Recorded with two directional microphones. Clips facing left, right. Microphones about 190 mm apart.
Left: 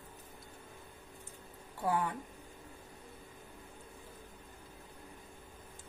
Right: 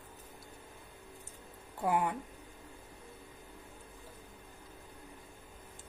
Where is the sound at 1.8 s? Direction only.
20° right (ahead or behind).